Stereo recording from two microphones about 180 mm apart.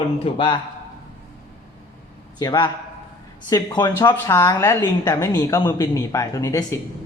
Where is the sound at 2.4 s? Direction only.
25° left (ahead or behind).